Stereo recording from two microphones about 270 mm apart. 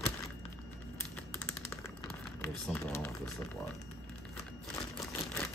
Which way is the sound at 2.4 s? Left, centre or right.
Centre.